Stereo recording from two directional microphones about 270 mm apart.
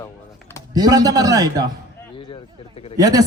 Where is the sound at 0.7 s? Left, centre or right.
Centre.